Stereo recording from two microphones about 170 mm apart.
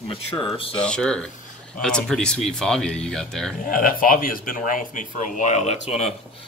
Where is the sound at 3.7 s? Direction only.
55° left (ahead or behind).